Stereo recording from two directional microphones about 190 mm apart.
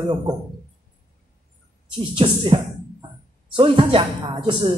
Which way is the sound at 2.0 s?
25° right (ahead or behind).